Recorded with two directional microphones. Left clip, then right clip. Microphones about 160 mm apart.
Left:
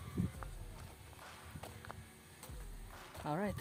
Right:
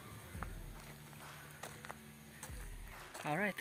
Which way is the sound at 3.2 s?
30° left (ahead or behind).